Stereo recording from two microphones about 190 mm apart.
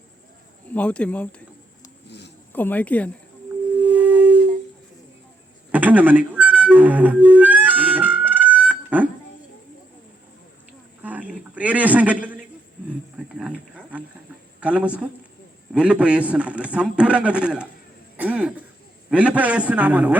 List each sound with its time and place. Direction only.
0.7 s speech: 5° left (ahead or behind)
2.0 s a sound: 65° left (ahead or behind)
2.5 s speech: 10° left (ahead or behind)
3.8 s music: 10° right (ahead or behind)
5.7 s music: 10° right (ahead or behind)
11.0 s a sound: 10° right (ahead or behind)
14.6 s a man's voice: 5° right (ahead or behind)
18.2 s throat clearing: 5° right (ahead or behind)
19.1 s a man's voice: 5° right (ahead or behind)